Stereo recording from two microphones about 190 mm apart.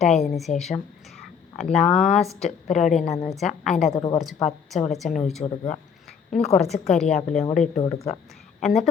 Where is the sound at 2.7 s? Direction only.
40° left (ahead or behind).